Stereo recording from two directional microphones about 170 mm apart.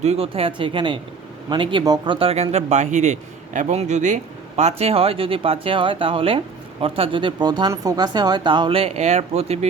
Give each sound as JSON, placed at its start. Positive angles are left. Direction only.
{"t": 0.0, "sound": "speech", "side_deg": -35}